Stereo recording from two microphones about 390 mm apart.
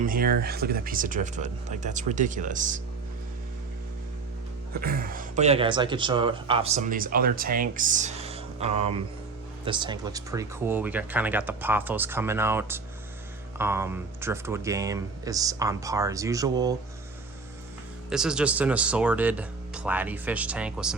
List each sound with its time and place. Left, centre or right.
0.0 s speech: right
4.7 s speech: right
18.1 s speech: centre